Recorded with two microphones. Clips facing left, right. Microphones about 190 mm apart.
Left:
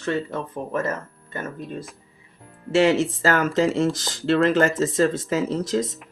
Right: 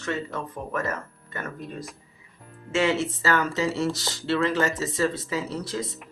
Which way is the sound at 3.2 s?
45° left (ahead or behind).